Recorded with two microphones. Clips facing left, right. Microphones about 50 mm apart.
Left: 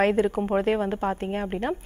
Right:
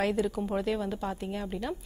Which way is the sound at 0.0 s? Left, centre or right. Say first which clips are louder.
Left 7 dB; left.